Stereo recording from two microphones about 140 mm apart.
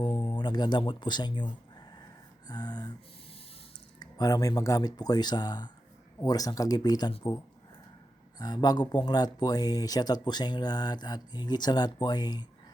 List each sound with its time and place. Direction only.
0.0 s speech: 30° left (ahead or behind)
2.5 s a sound: 30° left (ahead or behind)
4.0 s speech: 25° left (ahead or behind)
8.4 s speech: 30° left (ahead or behind)